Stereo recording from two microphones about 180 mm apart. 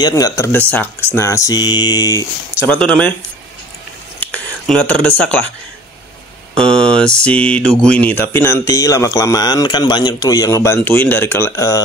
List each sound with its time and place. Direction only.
0.0 s speech: 20° left (ahead or behind)
2.6 s speech: 5° left (ahead or behind)
4.2 s a sound: 5° left (ahead or behind)
6.5 s speech: 5° left (ahead or behind)